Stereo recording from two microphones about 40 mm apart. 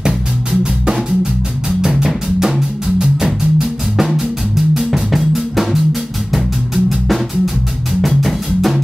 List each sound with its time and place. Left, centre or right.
0.0 s music: centre
2.0 s music: centre